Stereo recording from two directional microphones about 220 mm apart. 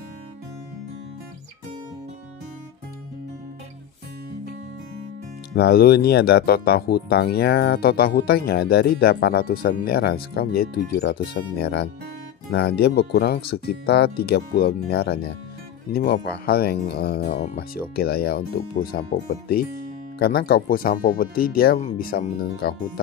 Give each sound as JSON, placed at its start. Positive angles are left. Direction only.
{"t": 5.5, "sound": "speech", "side_deg": 45}